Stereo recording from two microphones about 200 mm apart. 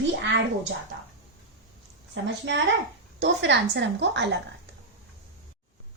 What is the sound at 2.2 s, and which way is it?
A woman's voice, 65° right (ahead or behind).